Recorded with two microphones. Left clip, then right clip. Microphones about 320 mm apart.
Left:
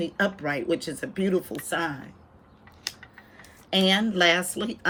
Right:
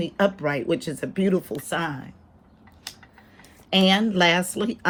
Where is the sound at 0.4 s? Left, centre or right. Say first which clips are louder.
Right 2 dB; right.